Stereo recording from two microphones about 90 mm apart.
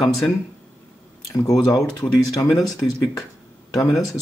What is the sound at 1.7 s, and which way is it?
Speech, 40° left (ahead or behind).